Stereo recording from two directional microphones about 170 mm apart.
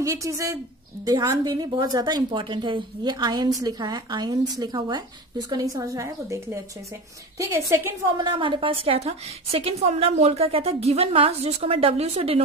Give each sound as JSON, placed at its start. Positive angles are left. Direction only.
{"t": 0.0, "sound": "a woman's voice", "side_deg": -20}
{"t": 8.2, "sound": "a woman's voice", "side_deg": -30}